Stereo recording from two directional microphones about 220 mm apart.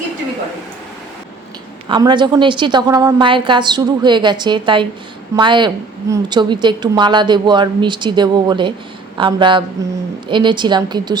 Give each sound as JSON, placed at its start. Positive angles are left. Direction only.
{"t": 1.9, "sound": "a woman's voice", "side_deg": -20}